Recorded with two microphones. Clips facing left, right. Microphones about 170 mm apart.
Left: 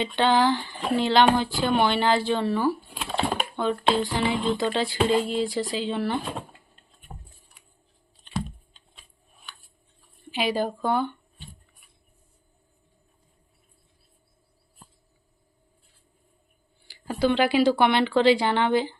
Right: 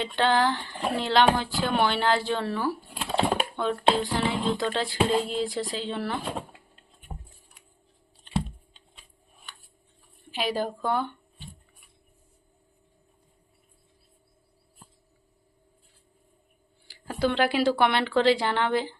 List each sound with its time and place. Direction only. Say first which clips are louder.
0.0 s speech: left 2 dB; centre (ahead or behind)
7.1 s a sound: right 2 dB; 15° right (ahead or behind)
8.3 s computer keyboard: right 2 dB; 25° right (ahead or behind)
10.3 s speech: left 3 dB; centre (ahead or behind)
16.9 s speech: left 3 dB; centre (ahead or behind)